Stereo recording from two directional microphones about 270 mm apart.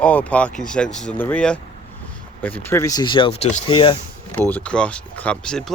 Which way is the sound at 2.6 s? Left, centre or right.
Centre.